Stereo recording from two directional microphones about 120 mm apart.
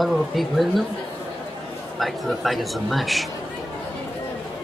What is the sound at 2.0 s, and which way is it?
Speech, centre (ahead or behind).